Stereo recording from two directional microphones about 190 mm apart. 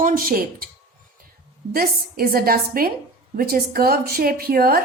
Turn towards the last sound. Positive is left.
turn(degrees=-50)  # may be behind; listen again after turning